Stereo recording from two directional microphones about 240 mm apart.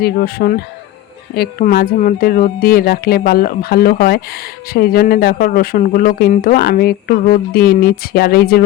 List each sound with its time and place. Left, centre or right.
0.0 s speech: left